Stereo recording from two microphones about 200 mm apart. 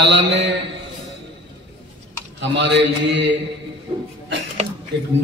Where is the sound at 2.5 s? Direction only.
60° right (ahead or behind).